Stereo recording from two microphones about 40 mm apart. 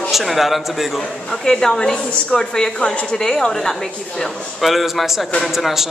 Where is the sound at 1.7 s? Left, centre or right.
Centre.